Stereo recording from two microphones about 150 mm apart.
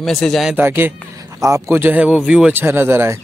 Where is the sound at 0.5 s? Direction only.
15° right (ahead or behind).